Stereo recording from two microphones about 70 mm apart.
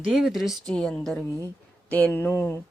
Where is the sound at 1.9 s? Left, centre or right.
Left.